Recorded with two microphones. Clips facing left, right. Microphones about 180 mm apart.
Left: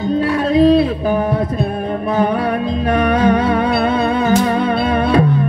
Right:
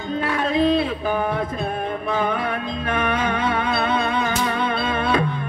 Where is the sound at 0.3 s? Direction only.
35° left (ahead or behind).